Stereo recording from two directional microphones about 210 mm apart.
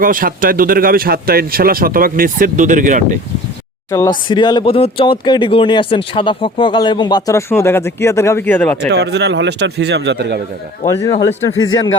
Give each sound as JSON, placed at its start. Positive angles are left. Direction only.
{"t": 0.0, "sound": "a man's voice", "side_deg": -40}
{"t": 4.3, "sound": "speech", "side_deg": 20}
{"t": 8.9, "sound": "a man's voice", "side_deg": -55}
{"t": 11.4, "sound": "speech", "side_deg": 15}